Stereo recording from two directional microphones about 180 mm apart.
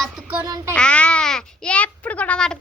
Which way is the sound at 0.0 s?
5° right (ahead or behind).